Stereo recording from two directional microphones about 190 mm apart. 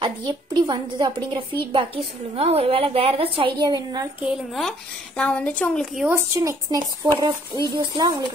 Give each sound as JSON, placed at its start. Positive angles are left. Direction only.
{"t": 0.0, "sound": "a woman's voice", "side_deg": -25}
{"t": 4.2, "sound": "speech", "side_deg": 0}
{"t": 6.0, "sound": "a woman's voice", "side_deg": -15}